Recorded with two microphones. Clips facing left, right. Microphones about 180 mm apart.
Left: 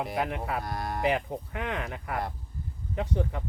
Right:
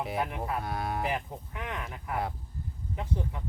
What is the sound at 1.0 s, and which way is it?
Speech, 70° left (ahead or behind).